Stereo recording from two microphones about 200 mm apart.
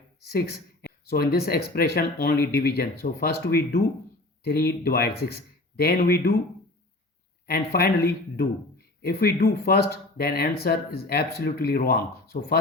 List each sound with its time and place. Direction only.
0.3 s speech: 50° left (ahead or behind)
7.4 s speech: 50° left (ahead or behind)